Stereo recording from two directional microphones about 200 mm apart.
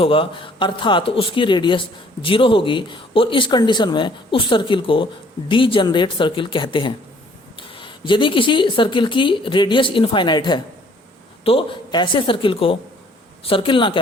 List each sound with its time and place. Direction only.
0.0 s speech: 25° left (ahead or behind)